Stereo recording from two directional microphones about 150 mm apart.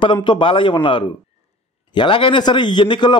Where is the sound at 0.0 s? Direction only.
30° left (ahead or behind).